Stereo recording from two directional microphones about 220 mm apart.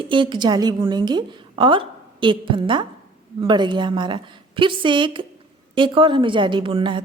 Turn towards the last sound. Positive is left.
turn(degrees=-20)  # may be behind; listen again after turning